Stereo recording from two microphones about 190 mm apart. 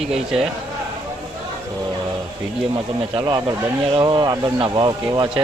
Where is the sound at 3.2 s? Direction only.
20° right (ahead or behind).